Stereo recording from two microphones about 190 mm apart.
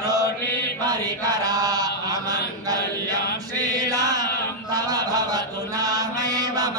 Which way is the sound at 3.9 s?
20° right (ahead or behind).